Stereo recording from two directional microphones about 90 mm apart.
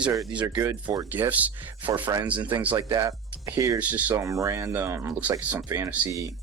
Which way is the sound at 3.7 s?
15° right (ahead or behind).